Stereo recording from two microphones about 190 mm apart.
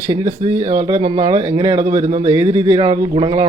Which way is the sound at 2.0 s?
35° right (ahead or behind).